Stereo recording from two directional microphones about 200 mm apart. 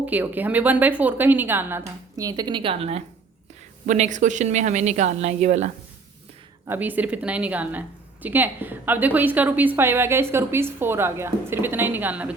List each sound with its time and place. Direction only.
0.0 s a woman's voice: 10° right (ahead or behind); by 5.7 s 35° right (ahead or behind)
6.7 s speech: 10° right (ahead or behind)